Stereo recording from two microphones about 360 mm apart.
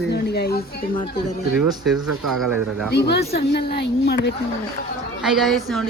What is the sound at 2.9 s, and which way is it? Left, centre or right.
Speech, left.